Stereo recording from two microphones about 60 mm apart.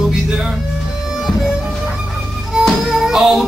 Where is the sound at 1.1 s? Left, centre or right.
Centre.